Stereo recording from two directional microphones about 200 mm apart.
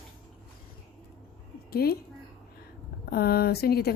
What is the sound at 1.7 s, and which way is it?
Speech, 50° left (ahead or behind).